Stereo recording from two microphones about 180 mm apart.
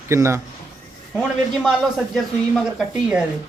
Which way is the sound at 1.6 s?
Centre (ahead or behind).